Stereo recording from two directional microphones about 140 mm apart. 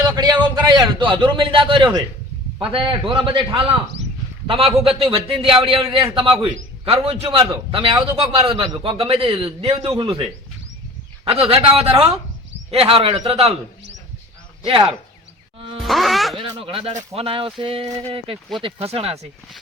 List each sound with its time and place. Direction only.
0.2 s a sound: 30° right (ahead or behind)
0.5 s a man's voice: 35° right (ahead or behind)
11.3 s a man's voice: 40° right (ahead or behind)
14.6 s speech: 40° right (ahead or behind)
15.8 s speech: centre (ahead or behind)
16.4 s a man's voice: 40° right (ahead or behind)